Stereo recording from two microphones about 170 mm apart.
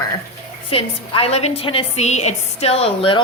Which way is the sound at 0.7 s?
35° left (ahead or behind).